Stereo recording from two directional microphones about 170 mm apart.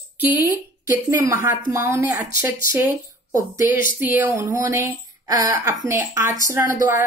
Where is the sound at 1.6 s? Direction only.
15° right (ahead or behind).